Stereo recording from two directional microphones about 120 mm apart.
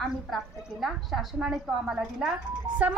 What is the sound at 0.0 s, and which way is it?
A woman's voice, centre (ahead or behind).